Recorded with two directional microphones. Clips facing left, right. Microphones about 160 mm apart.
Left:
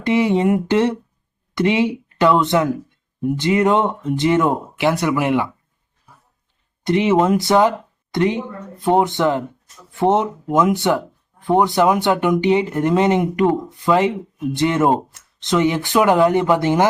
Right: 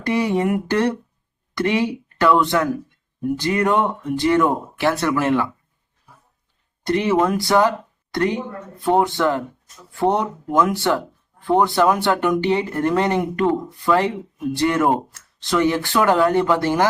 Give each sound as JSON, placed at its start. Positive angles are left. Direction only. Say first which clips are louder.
{"t": 0.0, "sound": "speech", "louder": "left 3 dB", "side_deg": 20}
{"t": 6.8, "sound": "speech", "louder": "left 3 dB", "side_deg": 20}